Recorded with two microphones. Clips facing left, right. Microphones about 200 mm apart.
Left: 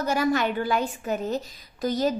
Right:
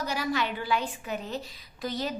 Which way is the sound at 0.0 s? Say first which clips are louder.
Left 6 dB; 50° left (ahead or behind).